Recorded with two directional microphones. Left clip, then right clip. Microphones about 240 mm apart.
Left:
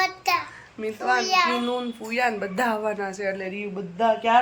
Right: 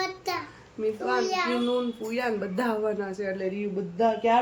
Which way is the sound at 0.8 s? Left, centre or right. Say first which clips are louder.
Left 3 dB; centre.